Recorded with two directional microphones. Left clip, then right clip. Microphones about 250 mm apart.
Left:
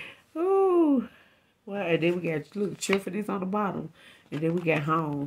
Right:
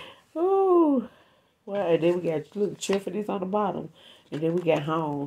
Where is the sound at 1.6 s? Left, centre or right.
Left.